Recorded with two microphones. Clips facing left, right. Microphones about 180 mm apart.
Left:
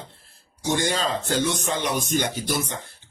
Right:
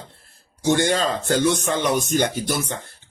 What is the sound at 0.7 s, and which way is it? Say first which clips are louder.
Speech: right 5 dB; 60° right (ahead or behind).